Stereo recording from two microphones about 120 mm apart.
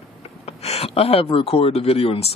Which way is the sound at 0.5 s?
60° left (ahead or behind).